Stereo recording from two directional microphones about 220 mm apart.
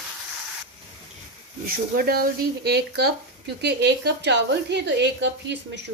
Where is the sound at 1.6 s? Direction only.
40° right (ahead or behind).